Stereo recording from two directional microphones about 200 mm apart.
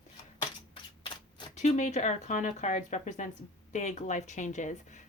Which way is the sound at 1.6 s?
35° left (ahead or behind).